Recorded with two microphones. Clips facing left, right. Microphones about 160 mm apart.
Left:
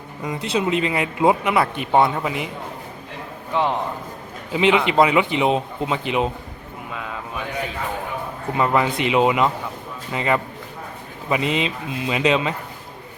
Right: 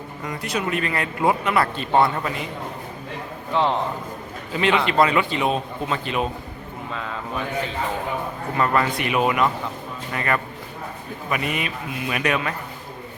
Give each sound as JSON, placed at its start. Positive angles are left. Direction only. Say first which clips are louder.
{"t": 0.3, "sound": "a man's voice", "louder": "left 4 dB", "side_deg": 25}
{"t": 3.5, "sound": "a man's voice", "louder": "even", "side_deg": 15}
{"t": 8.5, "sound": "a man's voice", "louder": "left 2 dB", "side_deg": 15}